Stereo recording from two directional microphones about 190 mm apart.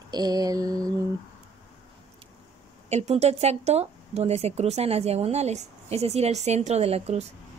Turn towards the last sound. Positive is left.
turn(degrees=-35)  # may be behind; listen again after turning